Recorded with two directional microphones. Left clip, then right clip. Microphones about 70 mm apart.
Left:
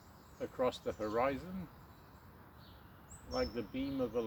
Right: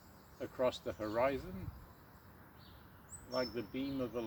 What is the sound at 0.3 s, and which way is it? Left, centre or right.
Speech, left.